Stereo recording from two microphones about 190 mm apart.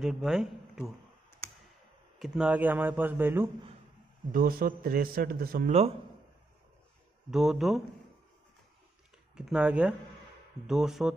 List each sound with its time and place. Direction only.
0.0 s a man's voice: centre (ahead or behind)
2.1 s speech: 5° right (ahead or behind)
4.3 s a man's voice: 50° right (ahead or behind)
5.7 s a man's voice: 35° right (ahead or behind)
7.2 s speech: centre (ahead or behind)
9.3 s speech: 5° right (ahead or behind)